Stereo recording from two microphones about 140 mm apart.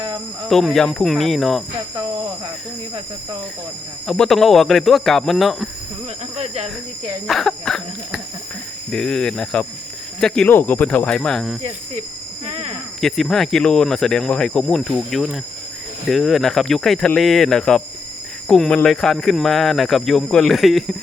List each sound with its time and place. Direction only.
0.4 s speech: centre (ahead or behind)
4.0 s speech: 5° left (ahead or behind)
6.3 s cricket: 50° right (ahead or behind)
7.3 s speech: 5° left (ahead or behind)
12.5 s cricket: 45° right (ahead or behind)
13.0 s speech: centre (ahead or behind)